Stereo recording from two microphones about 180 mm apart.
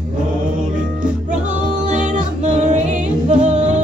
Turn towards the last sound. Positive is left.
turn(degrees=-40)  # may be behind; listen again after turning